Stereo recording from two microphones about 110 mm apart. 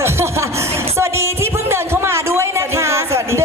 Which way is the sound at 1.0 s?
25° right (ahead or behind).